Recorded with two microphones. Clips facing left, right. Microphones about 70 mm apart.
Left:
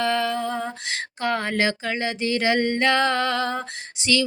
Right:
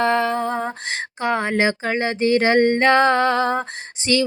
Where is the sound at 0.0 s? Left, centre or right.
Right.